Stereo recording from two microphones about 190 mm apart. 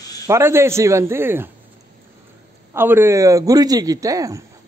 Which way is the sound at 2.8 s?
10° right (ahead or behind).